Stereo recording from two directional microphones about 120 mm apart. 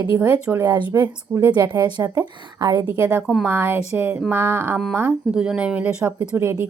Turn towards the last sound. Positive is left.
turn(degrees=-20)  # may be behind; listen again after turning